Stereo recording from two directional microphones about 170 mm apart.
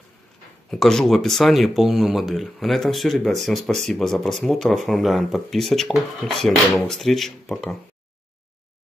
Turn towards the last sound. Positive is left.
turn(degrees=0)  # may be behind; listen again after turning